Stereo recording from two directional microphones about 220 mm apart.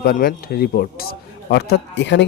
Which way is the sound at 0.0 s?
40° left (ahead or behind).